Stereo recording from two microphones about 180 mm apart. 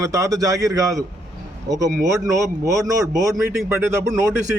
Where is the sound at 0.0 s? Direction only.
20° right (ahead or behind).